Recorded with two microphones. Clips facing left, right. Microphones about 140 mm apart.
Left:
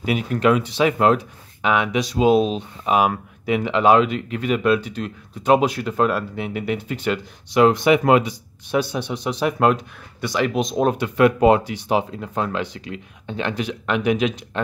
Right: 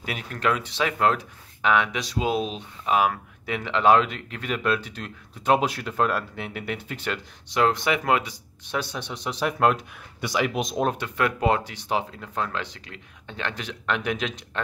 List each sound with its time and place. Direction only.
0.0 s speech: 10° left (ahead or behind)
8.6 s speech: 5° left (ahead or behind)
10.9 s speech: 15° left (ahead or behind)